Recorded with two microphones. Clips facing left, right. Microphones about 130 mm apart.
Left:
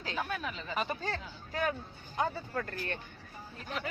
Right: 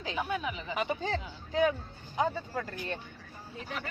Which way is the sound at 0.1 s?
15° right (ahead or behind).